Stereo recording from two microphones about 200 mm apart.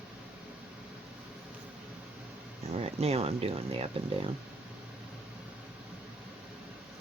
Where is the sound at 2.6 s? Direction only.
30° right (ahead or behind).